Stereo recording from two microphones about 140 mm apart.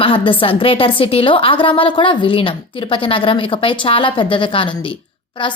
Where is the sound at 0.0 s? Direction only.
40° left (ahead or behind).